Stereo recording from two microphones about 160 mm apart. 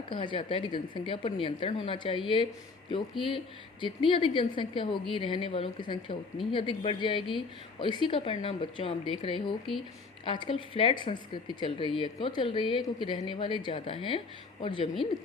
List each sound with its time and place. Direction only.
0.1 s speech: 30° left (ahead or behind)